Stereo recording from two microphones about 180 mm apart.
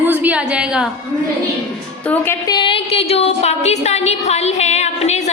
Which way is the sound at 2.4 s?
25° left (ahead or behind).